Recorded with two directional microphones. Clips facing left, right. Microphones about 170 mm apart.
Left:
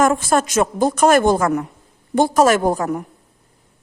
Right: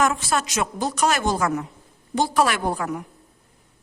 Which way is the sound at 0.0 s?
50° left (ahead or behind).